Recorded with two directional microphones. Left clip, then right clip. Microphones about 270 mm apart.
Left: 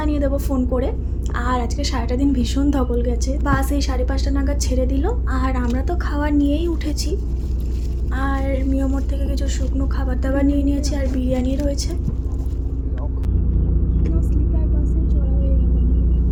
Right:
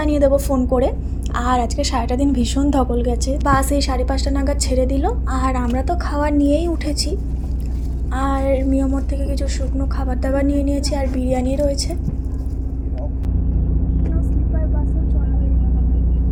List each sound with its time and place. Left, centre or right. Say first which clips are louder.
0.0 s a woman's voice: right 7 dB; right